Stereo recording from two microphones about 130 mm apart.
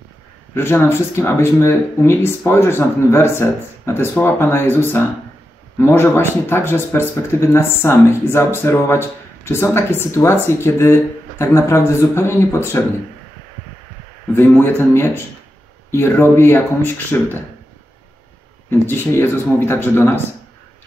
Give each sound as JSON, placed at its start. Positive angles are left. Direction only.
{"t": 0.6, "sound": "speech", "side_deg": 20}
{"t": 14.3, "sound": "speech", "side_deg": 15}
{"t": 18.7, "sound": "speech", "side_deg": 15}